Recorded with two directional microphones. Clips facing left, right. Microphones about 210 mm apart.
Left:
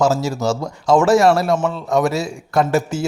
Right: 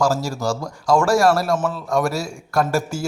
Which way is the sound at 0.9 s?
5° left (ahead or behind).